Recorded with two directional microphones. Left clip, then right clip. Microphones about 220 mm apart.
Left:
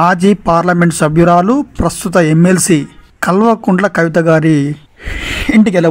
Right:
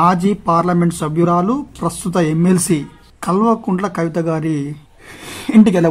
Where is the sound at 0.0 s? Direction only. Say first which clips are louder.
Left 4 dB; 25° left (ahead or behind).